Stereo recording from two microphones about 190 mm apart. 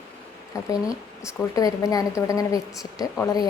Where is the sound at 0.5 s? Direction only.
15° left (ahead or behind).